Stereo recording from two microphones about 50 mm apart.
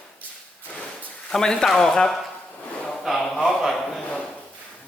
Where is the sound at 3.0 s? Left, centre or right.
Centre.